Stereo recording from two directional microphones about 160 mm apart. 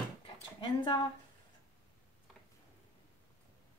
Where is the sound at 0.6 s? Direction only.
30° left (ahead or behind).